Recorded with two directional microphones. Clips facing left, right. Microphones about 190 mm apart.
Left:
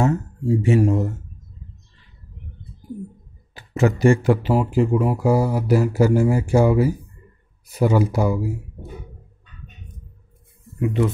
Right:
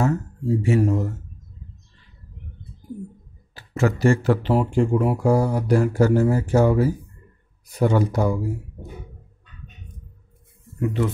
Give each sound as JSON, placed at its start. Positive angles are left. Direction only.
{"t": 0.0, "sound": "speech", "side_deg": 15}
{"t": 3.5, "sound": "speech", "side_deg": 20}
{"t": 10.8, "sound": "speech", "side_deg": 15}